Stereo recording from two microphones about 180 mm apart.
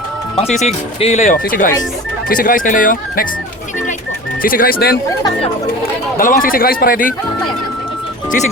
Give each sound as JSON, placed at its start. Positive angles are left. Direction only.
{"t": 0.6, "sound": "speech", "side_deg": 35}
{"t": 4.4, "sound": "speech", "side_deg": 55}
{"t": 6.1, "sound": "speech", "side_deg": 50}